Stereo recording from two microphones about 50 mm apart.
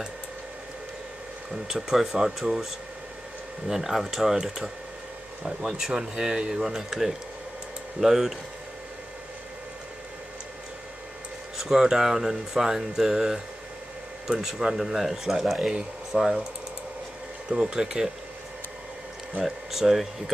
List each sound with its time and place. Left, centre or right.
1.5 s speech: centre
11.5 s speech: centre
17.5 s speech: centre
19.4 s speech: centre